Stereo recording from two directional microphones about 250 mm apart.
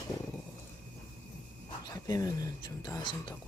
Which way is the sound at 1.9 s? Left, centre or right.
Centre.